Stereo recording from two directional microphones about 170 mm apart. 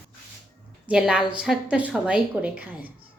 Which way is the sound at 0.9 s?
5° right (ahead or behind).